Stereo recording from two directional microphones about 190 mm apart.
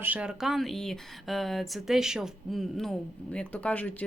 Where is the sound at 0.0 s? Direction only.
5° right (ahead or behind).